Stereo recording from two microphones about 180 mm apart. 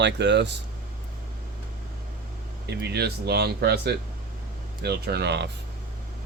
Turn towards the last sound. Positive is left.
turn(degrees=-70)  # may be behind; listen again after turning